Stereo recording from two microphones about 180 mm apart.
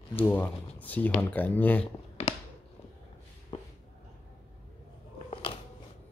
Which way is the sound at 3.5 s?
35° left (ahead or behind).